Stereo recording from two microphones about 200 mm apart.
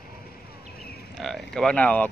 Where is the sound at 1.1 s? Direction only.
Centre (ahead or behind).